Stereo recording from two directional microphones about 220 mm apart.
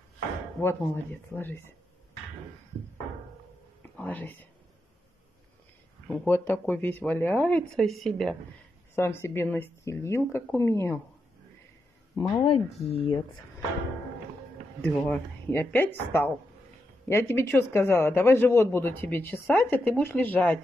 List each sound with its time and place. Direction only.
0.6 s speech: 10° left (ahead or behind)
3.8 s speech: 5° left (ahead or behind)
6.0 s speech: 5° left (ahead or behind)
12.2 s speech: 20° left (ahead or behind)
14.8 s speech: 10° left (ahead or behind)